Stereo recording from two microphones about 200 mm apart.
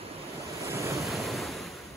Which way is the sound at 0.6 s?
15° right (ahead or behind).